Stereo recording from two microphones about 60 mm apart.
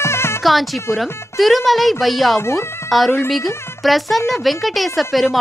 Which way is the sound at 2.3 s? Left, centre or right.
Left.